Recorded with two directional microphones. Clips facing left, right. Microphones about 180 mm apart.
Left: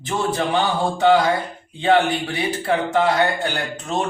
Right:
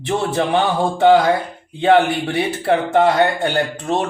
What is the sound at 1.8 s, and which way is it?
Speech, 55° right (ahead or behind).